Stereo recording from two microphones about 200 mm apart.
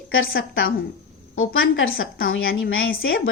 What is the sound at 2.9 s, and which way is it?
Speech, 50° left (ahead or behind).